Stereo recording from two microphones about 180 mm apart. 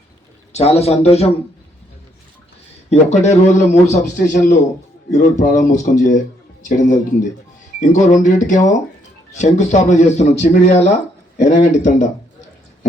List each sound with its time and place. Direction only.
0.5 s a man's voice: 35° left (ahead or behind)
2.9 s a man's voice: 40° left (ahead or behind)